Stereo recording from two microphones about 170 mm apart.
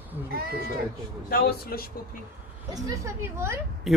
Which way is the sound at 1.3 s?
65° left (ahead or behind).